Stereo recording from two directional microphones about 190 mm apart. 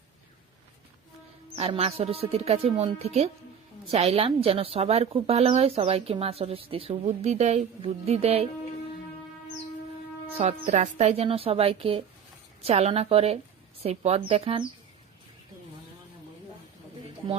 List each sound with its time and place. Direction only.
1.5 s speech: 30° right (ahead or behind)
10.3 s speech: 40° right (ahead or behind)